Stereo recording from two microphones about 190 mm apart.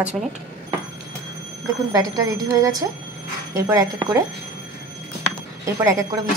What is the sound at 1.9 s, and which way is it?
Speech, 20° right (ahead or behind).